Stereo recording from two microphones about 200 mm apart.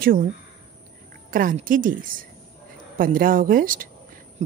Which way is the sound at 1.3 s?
40° right (ahead or behind).